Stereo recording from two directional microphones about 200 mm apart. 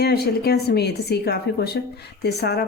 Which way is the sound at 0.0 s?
50° left (ahead or behind).